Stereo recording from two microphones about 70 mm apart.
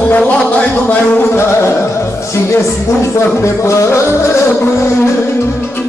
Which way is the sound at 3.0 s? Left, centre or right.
Left.